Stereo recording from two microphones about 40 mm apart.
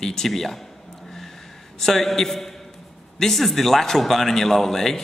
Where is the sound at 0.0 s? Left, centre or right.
Centre.